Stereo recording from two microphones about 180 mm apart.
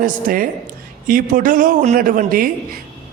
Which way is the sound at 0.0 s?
50° right (ahead or behind).